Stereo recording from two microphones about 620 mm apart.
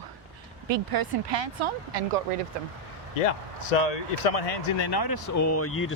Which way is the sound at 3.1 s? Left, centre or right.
Left.